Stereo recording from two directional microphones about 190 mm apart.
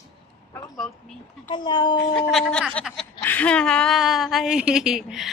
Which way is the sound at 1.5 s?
25° left (ahead or behind).